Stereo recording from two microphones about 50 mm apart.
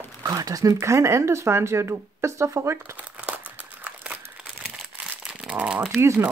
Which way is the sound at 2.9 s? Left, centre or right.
Right.